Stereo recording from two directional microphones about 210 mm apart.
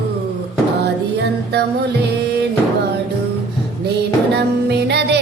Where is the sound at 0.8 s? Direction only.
50° right (ahead or behind).